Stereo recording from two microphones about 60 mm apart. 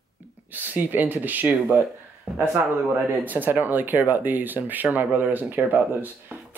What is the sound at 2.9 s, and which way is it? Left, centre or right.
Speech, right.